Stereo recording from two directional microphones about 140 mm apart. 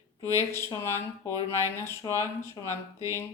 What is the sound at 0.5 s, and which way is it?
Speech, 20° left (ahead or behind).